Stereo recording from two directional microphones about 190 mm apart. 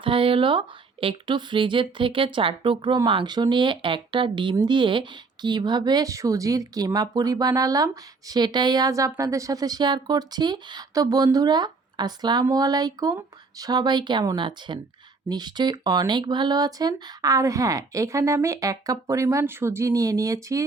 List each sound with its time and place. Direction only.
0.0 s speech: 30° right (ahead or behind)